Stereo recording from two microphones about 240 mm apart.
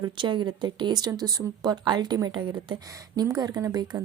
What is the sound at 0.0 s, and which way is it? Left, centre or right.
Speech, centre.